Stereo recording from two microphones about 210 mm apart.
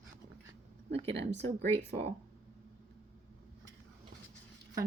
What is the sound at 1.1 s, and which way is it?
Speech, 55° right (ahead or behind).